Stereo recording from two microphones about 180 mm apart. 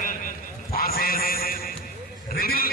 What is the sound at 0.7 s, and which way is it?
Music, 55° left (ahead or behind).